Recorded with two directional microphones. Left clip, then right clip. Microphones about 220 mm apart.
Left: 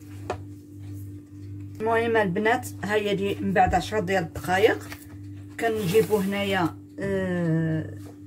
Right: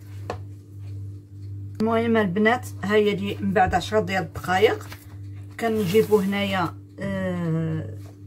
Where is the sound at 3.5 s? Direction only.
10° right (ahead or behind).